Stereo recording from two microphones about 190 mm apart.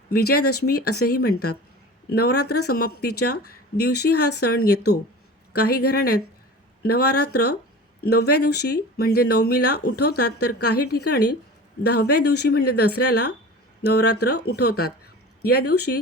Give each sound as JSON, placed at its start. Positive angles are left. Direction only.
{"t": 0.1, "sound": "speech", "side_deg": 55}